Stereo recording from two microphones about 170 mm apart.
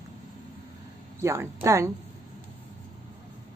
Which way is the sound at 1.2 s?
15° right (ahead or behind).